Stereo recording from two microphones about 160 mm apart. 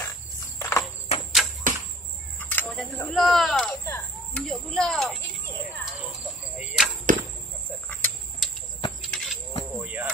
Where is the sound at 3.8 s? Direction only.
20° left (ahead or behind).